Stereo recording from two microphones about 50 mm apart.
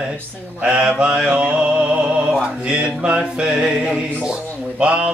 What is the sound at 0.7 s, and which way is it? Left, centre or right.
Mantra, right.